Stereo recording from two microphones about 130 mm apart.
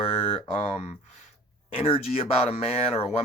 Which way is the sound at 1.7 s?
50° left (ahead or behind).